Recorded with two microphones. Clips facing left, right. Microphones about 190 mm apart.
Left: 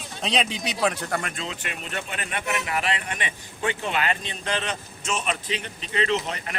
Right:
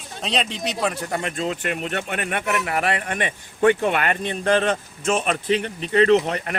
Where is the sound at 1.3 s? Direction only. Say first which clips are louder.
Right 9 dB; 50° right (ahead or behind).